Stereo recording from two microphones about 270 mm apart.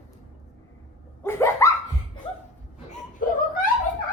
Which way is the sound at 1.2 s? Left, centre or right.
Centre.